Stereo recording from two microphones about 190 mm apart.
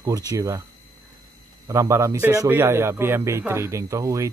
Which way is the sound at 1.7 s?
15° right (ahead or behind).